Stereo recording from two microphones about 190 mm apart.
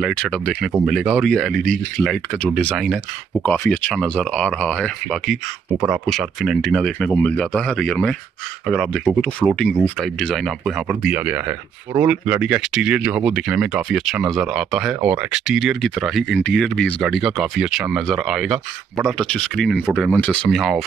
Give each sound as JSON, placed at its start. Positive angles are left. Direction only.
{"t": 0.0, "sound": "speech", "side_deg": 5}
{"t": 5.7, "sound": "speech", "side_deg": -10}
{"t": 6.0, "sound": "speech", "side_deg": 0}